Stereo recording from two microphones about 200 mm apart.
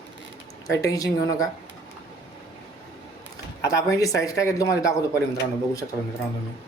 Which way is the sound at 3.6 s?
15° left (ahead or behind).